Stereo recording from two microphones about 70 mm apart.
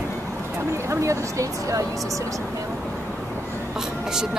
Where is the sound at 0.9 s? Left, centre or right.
Right.